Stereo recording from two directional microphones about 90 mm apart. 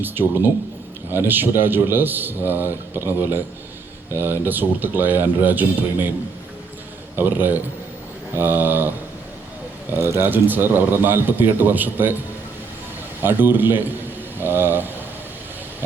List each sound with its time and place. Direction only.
0.0 s a man's voice: 20° right (ahead or behind)
7.2 s a man's voice: 20° right (ahead or behind)
9.9 s a man's voice: 25° right (ahead or behind)
13.2 s a man's voice: 20° right (ahead or behind)